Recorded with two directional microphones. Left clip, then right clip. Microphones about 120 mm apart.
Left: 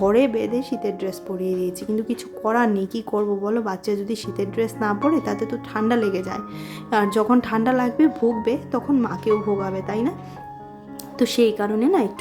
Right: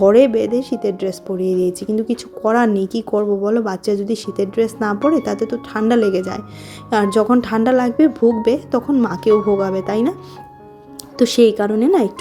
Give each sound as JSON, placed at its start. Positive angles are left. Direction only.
{"t": 0.0, "sound": "speech", "side_deg": -30}
{"t": 11.2, "sound": "speech", "side_deg": -30}